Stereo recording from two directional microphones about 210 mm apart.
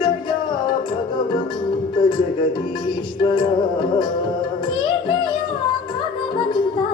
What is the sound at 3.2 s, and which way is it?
Music, 25° left (ahead or behind).